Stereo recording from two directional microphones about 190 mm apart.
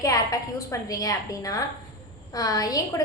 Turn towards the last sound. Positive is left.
turn(degrees=20)  # may be behind; listen again after turning